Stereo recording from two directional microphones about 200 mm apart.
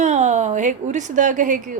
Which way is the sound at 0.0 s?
35° right (ahead or behind).